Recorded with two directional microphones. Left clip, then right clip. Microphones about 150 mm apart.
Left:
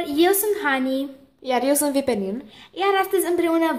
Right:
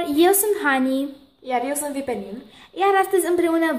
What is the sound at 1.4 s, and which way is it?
Speech, 50° left (ahead or behind).